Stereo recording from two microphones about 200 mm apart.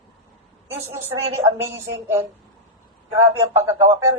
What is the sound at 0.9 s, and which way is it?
Speech, 10° right (ahead or behind).